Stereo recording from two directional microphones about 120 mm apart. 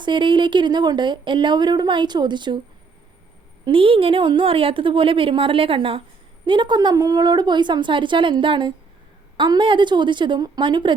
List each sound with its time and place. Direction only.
0.0 s speech: 40° right (ahead or behind)
3.7 s a woman's voice: 45° right (ahead or behind)